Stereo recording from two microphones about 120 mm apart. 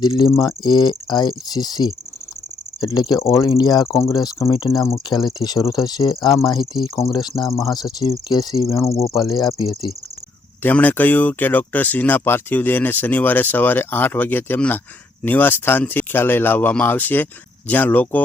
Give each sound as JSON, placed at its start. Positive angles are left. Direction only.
{"t": 0.0, "sound": "speech", "side_deg": 40}
{"t": 0.3, "sound": "speech", "side_deg": 30}
{"t": 6.8, "sound": "cricket", "side_deg": 25}
{"t": 7.1, "sound": "speech", "side_deg": 35}
{"t": 7.4, "sound": "cricket", "side_deg": 30}
{"t": 9.1, "sound": "speech", "side_deg": 35}
{"t": 10.6, "sound": "speech", "side_deg": 15}